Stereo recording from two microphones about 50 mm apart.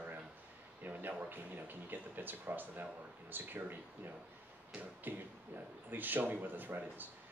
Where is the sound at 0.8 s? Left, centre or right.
Right.